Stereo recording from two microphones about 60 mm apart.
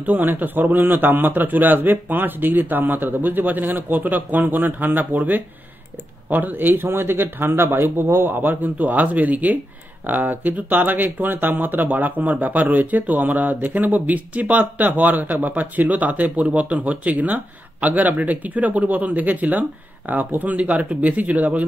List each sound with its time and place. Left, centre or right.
0.0 s a man's voice: right